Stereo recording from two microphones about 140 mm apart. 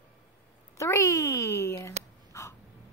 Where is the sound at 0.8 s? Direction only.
20° left (ahead or behind).